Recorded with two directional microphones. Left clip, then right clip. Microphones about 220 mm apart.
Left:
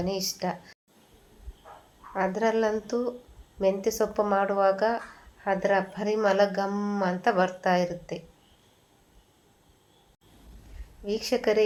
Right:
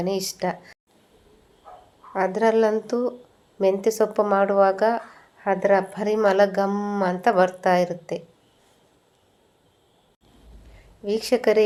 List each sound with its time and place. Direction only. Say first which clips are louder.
0.0 s speech: right 5 dB; 30° right (ahead or behind)
2.1 s speech: right 6 dB; 35° right (ahead or behind)
11.0 s speech: right 6 dB; 35° right (ahead or behind)